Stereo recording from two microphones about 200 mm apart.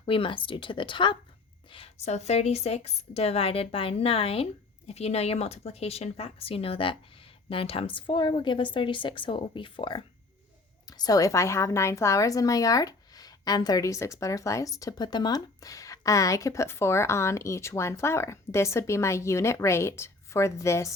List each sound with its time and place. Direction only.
0.0 s a woman's voice: 25° left (ahead or behind)